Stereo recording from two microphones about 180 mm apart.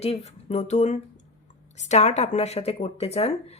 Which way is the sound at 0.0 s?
35° left (ahead or behind).